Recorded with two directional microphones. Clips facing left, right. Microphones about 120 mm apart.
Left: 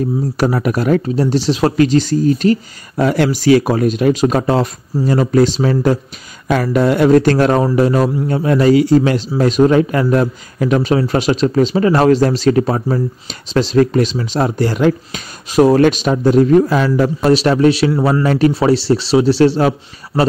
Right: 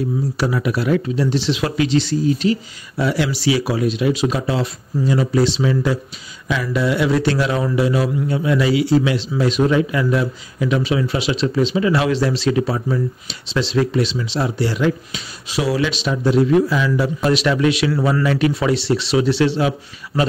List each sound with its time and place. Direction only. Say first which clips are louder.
0.4 s a man's voice: left 5 dB; 45° left (ahead or behind)
17.2 s speech: left 6 dB; 35° left (ahead or behind)
18.2 s speech: left 5 dB; 40° left (ahead or behind)